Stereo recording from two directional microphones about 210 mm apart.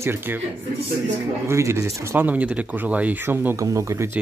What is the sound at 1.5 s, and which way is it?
Speech, 15° right (ahead or behind).